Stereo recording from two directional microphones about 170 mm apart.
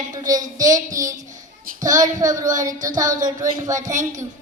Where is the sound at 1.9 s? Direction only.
20° right (ahead or behind).